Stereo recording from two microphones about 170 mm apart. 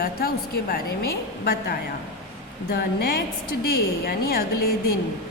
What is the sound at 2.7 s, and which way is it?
A woman's voice, 65° left (ahead or behind).